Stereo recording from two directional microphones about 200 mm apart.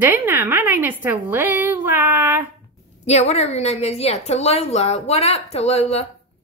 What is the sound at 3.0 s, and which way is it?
A woman's voice, 35° left (ahead or behind).